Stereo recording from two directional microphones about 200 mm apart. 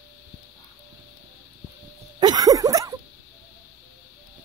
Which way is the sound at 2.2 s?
20° right (ahead or behind).